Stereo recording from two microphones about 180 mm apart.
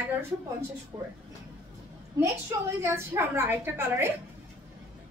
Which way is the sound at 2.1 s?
15° right (ahead or behind).